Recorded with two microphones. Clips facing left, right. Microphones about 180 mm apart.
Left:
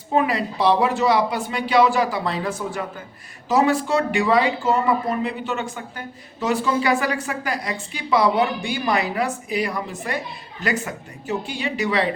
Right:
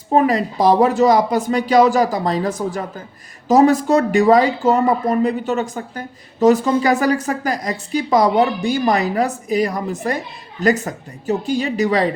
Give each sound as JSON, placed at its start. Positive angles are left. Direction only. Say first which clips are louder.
{"t": 0.1, "sound": "speech", "louder": "right 5 dB", "side_deg": -40}